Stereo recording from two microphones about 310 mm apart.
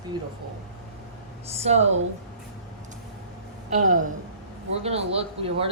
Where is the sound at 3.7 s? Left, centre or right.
Right.